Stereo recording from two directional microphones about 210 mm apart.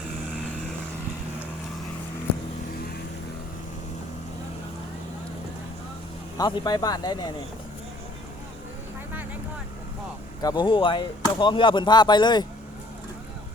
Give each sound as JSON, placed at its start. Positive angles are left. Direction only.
{"t": 6.3, "sound": "speech", "side_deg": 20}
{"t": 10.4, "sound": "speech", "side_deg": 20}